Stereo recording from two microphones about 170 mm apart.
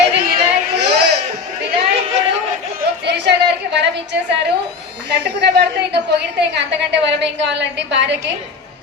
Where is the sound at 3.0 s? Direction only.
80° right.